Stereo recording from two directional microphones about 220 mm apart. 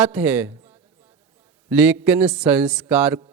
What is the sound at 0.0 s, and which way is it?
Speech, 10° right (ahead or behind).